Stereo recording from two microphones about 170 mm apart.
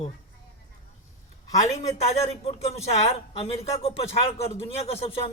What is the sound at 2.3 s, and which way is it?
Speech, 40° left (ahead or behind).